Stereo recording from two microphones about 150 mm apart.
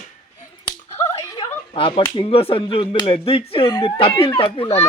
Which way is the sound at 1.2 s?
20° left (ahead or behind).